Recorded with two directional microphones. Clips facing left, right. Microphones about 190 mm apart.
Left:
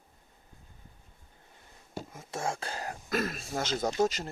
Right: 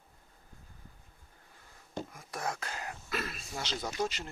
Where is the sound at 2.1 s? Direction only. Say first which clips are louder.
Left 6 dB; 25° left (ahead or behind); by 4.3 s 40° left (ahead or behind).